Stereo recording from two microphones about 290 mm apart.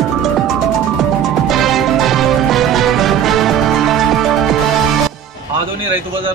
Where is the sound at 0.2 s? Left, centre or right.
Centre.